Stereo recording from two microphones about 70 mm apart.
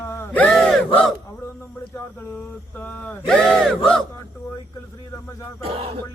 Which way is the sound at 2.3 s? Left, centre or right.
Left.